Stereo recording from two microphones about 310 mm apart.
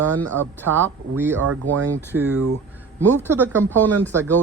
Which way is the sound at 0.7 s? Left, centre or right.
Right.